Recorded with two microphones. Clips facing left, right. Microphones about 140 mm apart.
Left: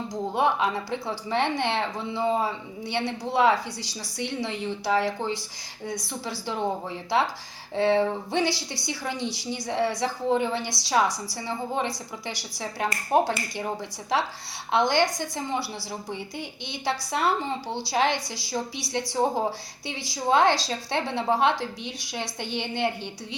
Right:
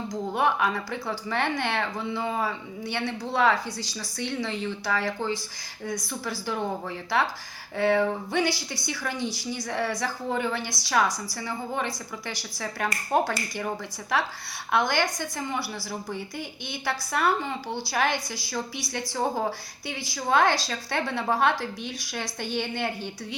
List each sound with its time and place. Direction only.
0.3 s speech: 25° left (ahead or behind)
7.8 s speech: 25° left (ahead or behind)